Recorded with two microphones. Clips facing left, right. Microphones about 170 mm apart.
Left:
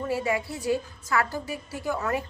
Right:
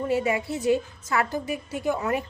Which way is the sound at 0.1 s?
20° right (ahead or behind).